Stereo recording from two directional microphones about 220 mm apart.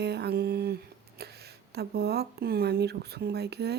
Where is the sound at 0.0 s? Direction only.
50° right (ahead or behind).